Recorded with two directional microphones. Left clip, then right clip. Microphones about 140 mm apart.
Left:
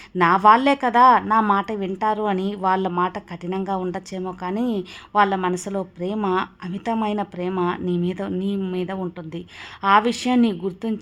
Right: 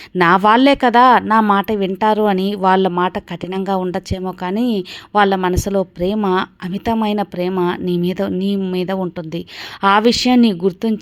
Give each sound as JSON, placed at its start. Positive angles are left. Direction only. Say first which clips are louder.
{"t": 0.2, "sound": "speech", "louder": "right 3 dB", "side_deg": -40}